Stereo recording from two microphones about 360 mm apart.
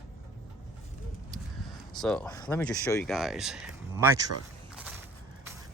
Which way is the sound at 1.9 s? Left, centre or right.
Centre.